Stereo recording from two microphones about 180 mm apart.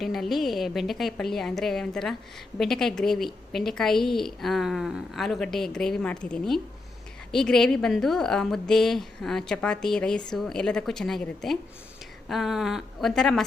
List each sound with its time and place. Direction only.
0.0 s a woman's voice: centre (ahead or behind)